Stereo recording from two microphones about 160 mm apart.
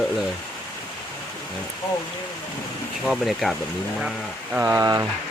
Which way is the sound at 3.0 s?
Centre (ahead or behind).